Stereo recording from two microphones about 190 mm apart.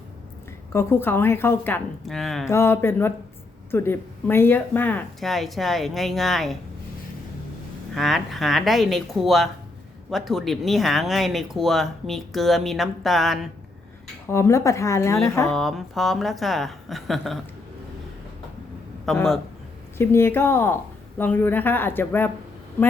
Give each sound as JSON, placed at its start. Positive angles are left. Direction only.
{"t": 0.7, "sound": "a woman's voice", "side_deg": 15}
{"t": 2.5, "sound": "a woman's voice", "side_deg": 15}
{"t": 7.9, "sound": "speech", "side_deg": 0}
{"t": 14.3, "sound": "a woman's voice", "side_deg": 15}
{"t": 15.4, "sound": "speech", "side_deg": 0}
{"t": 19.0, "sound": "speech", "side_deg": 0}
{"t": 20.0, "sound": "a woman's voice", "side_deg": 10}